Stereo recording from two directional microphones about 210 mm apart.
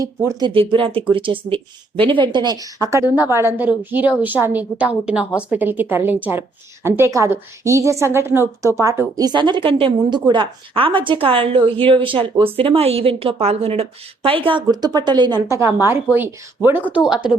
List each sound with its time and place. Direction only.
0.0 s a woman's voice: 15° right (ahead or behind)